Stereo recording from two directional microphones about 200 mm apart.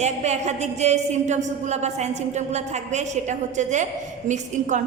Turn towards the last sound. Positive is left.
turn(degrees=-35)  # may be behind; listen again after turning